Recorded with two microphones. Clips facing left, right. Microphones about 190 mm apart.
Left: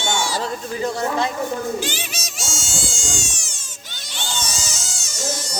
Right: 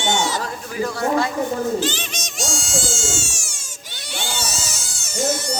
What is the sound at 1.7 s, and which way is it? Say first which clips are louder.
Cat: right 3 dB; 10° left (ahead or behind).